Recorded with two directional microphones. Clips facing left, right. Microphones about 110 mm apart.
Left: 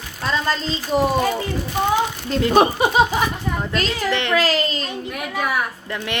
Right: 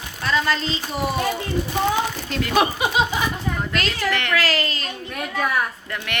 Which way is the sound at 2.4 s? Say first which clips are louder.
Left 5 dB; 35° left (ahead or behind).